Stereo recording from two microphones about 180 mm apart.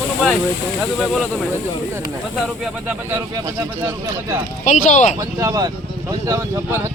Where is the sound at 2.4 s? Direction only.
5° right (ahead or behind).